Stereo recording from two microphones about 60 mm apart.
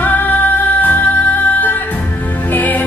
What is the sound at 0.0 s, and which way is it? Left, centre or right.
Music, left.